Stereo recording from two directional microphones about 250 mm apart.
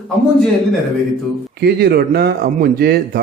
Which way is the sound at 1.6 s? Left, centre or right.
Right.